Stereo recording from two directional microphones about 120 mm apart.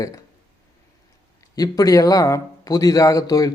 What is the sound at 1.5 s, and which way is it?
Speech, 30° left (ahead or behind).